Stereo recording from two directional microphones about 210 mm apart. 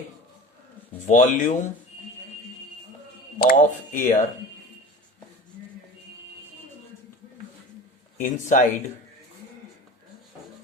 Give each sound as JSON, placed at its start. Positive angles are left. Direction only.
{"t": 1.0, "sound": "speech", "side_deg": 35}
{"t": 3.3, "sound": "speech", "side_deg": 40}
{"t": 8.2, "sound": "speech", "side_deg": 35}